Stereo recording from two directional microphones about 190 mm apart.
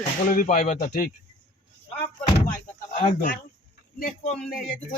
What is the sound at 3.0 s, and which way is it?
Speech, 45° left (ahead or behind).